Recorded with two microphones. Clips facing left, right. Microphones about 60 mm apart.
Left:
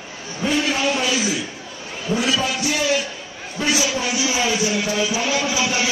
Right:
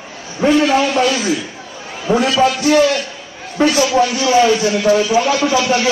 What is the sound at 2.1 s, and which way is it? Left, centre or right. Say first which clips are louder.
Speech: right 8 dB; right.